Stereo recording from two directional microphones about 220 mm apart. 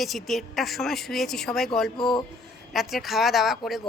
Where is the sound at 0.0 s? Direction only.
Centre (ahead or behind).